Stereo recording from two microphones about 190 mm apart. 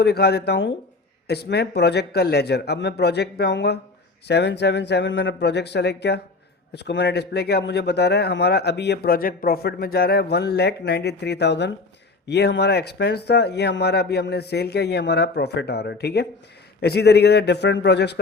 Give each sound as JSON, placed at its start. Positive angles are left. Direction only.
{"t": 0.0, "sound": "speech", "side_deg": 60}